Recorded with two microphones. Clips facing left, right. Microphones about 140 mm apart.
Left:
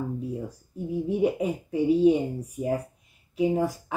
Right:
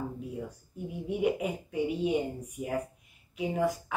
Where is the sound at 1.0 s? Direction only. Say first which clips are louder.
Left 4 dB; 35° left (ahead or behind).